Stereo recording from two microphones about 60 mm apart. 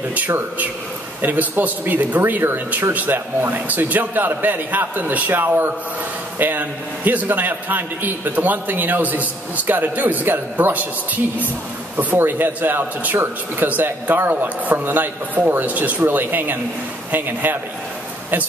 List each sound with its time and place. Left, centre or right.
1.2 s a man's voice: right
12.0 s a man's voice: right